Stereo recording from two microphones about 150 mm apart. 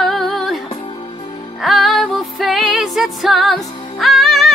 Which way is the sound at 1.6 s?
Centre (ahead or behind).